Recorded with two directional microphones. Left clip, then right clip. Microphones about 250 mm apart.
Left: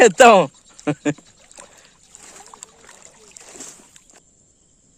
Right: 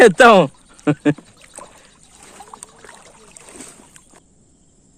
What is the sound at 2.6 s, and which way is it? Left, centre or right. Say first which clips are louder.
Trickle: right 3 dB; centre.